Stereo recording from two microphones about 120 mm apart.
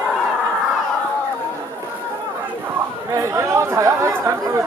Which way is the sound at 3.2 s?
25° right (ahead or behind).